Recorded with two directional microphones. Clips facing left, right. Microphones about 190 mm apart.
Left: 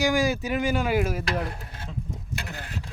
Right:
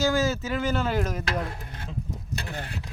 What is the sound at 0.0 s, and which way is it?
Speech, 15° left (ahead or behind).